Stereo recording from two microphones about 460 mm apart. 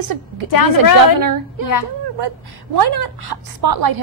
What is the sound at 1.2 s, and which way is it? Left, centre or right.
Speech, right.